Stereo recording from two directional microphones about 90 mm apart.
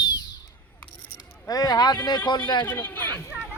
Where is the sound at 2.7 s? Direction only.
20° left (ahead or behind).